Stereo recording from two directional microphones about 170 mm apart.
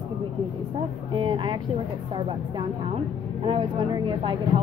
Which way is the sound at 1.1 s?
30° right (ahead or behind).